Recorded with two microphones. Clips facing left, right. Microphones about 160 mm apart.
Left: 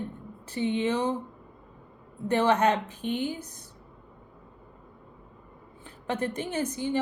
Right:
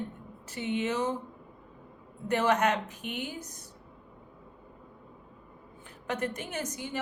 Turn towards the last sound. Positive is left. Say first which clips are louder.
# left 7 dB
turn(degrees=30)  # may be behind; listen again after turning